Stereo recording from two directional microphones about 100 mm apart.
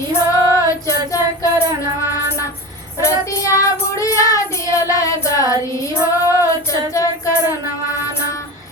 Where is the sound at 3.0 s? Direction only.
30° left (ahead or behind).